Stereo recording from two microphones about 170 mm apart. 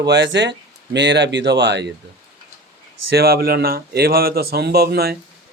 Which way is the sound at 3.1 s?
65° right (ahead or behind).